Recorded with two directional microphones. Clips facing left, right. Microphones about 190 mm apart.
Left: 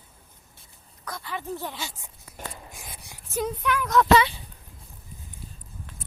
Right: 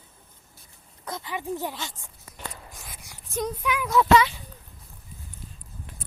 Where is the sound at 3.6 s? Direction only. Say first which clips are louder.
Left 1 dB; 10° right (ahead or behind).